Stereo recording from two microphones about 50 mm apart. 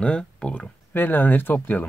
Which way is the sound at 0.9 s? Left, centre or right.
Left.